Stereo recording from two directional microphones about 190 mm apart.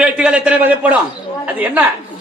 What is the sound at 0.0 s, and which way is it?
A man's voice, 5° right (ahead or behind).